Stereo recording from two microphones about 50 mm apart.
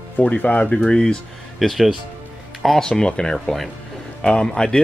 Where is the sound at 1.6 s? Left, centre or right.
Centre.